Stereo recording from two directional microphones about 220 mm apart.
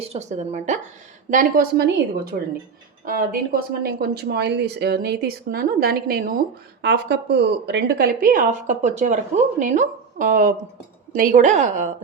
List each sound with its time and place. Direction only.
0.0 s a woman's voice: 30° right (ahead or behind)